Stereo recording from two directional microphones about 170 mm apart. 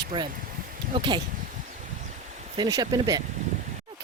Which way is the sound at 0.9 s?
30° right (ahead or behind).